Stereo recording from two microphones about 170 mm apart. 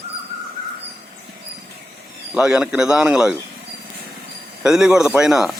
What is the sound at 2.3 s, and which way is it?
Speech, 5° right (ahead or behind).